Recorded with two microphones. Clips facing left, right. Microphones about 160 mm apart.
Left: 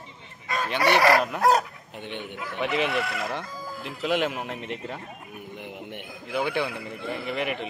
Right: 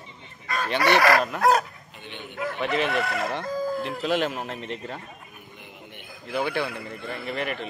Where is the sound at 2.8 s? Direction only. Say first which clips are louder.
Right 1 dB; 50° right (ahead or behind).